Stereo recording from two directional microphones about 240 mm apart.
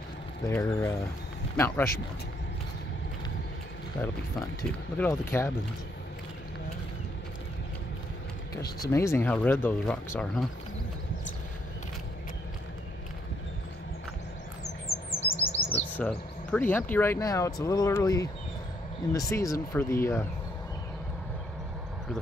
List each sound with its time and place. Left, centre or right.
0.5 s speech: centre
4.6 s speech: centre
8.8 s speech: centre
15.3 s bird: left
15.7 s speech: centre